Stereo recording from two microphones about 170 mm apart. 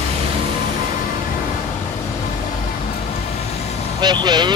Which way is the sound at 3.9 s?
25° right (ahead or behind).